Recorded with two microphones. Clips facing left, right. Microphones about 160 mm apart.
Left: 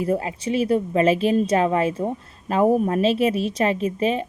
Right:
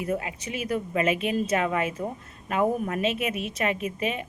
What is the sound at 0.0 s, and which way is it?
Speech, 30° left (ahead or behind).